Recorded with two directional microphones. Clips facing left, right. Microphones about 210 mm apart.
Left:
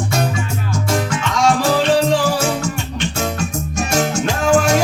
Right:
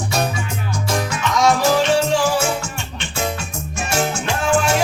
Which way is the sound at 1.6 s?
35° left (ahead or behind).